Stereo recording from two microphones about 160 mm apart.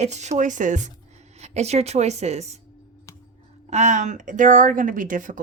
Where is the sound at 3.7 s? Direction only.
50° right (ahead or behind).